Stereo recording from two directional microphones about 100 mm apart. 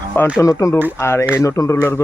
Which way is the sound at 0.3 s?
30° left (ahead or behind).